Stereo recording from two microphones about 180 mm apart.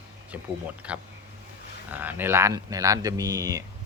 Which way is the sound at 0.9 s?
5° right (ahead or behind).